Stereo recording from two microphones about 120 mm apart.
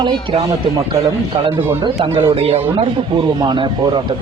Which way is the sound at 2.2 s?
55° right (ahead or behind).